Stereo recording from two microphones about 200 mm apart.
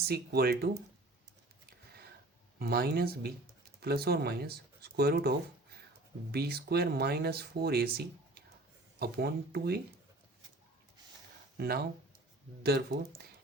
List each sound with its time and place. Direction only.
0.0 s speech: 50° right (ahead or behind)
2.6 s speech: 50° right (ahead or behind)
11.5 s speech: 50° right (ahead or behind)